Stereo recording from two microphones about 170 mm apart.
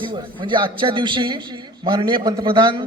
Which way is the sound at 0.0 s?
30° right (ahead or behind).